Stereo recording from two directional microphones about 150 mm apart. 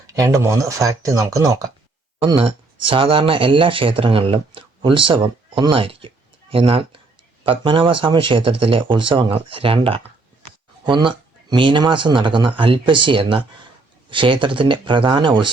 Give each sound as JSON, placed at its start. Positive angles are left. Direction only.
{"t": 0.1, "sound": "speech", "side_deg": -25}
{"t": 2.2, "sound": "speech", "side_deg": -35}